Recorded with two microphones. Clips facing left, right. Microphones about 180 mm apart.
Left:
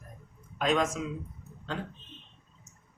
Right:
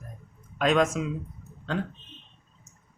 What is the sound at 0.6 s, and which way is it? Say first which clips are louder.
Speech: right 4 dB; 80° right.